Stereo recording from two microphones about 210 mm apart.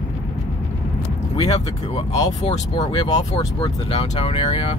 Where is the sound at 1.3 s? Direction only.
25° left (ahead or behind).